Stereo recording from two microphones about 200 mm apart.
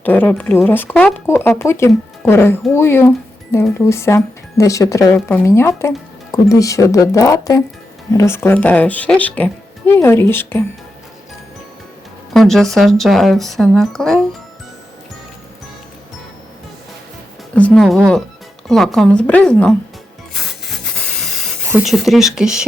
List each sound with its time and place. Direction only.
0.0 s speech: 10° left (ahead or behind)
12.3 s speech: centre (ahead or behind)
17.5 s speech: 5° left (ahead or behind)
20.3 s rub: centre (ahead or behind)
21.7 s speech: 5° right (ahead or behind)